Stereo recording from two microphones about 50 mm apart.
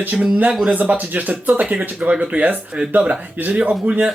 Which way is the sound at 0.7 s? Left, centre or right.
Right.